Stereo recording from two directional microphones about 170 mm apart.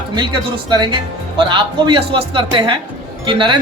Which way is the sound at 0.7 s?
25° right (ahead or behind).